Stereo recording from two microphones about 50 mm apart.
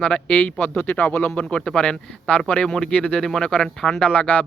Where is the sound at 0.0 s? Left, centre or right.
Left.